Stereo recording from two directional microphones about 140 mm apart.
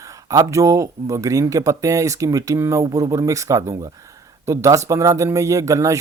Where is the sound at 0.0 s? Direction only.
25° right (ahead or behind).